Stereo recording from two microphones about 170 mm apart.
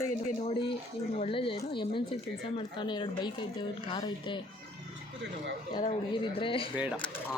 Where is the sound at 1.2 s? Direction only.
30° left (ahead or behind).